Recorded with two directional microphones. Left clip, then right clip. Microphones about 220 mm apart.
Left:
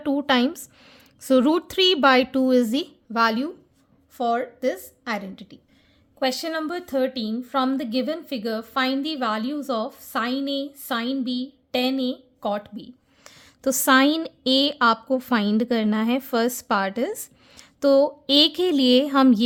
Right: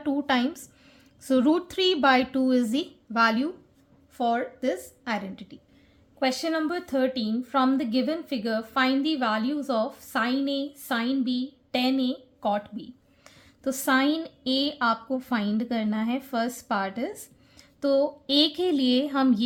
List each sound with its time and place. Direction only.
0.0 s a woman's voice: 40° left (ahead or behind)